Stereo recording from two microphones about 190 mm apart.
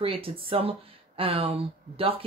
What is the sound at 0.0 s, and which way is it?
Speech, 30° right (ahead or behind).